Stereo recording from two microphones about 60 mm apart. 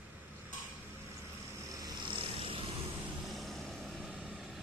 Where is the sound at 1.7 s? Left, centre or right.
Right.